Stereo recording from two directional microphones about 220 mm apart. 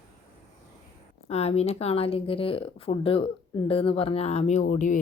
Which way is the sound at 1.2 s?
30° left (ahead or behind).